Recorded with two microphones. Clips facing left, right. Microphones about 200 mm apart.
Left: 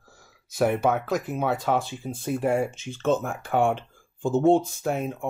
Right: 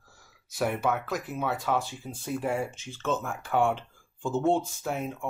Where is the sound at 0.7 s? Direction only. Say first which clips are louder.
Left 5 dB; 20° left (ahead or behind).